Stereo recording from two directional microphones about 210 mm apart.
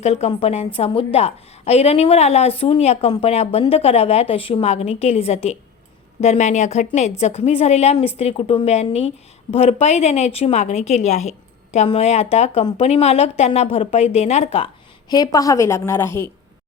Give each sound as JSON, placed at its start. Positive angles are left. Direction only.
{"t": 0.0, "sound": "a woman's voice", "side_deg": 30}
{"t": 15.1, "sound": "a woman's voice", "side_deg": 15}